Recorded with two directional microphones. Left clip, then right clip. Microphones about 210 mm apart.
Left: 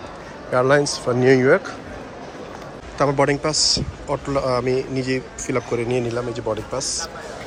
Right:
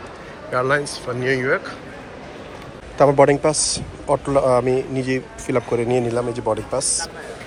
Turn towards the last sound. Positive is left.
turn(degrees=5)  # may be behind; listen again after turning